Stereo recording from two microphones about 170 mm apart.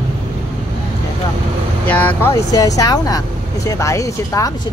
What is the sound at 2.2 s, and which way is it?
Speech, 20° left (ahead or behind).